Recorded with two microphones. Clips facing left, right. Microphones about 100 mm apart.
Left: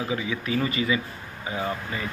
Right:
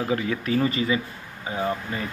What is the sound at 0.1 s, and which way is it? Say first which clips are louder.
Speech: right 3 dB; 50° right (ahead or behind).